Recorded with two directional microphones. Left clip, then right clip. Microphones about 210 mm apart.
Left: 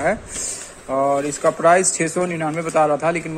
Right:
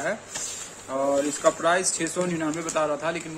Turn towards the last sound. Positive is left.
turn(degrees=20)  # may be behind; listen again after turning